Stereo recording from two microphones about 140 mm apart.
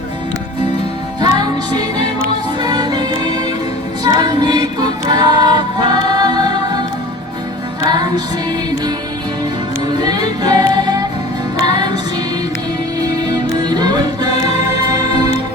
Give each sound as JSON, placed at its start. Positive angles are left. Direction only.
{"t": 1.2, "sound": "music", "side_deg": -30}
{"t": 7.9, "sound": "music", "side_deg": -30}
{"t": 10.0, "sound": "music", "side_deg": -30}
{"t": 13.2, "sound": "music", "side_deg": -30}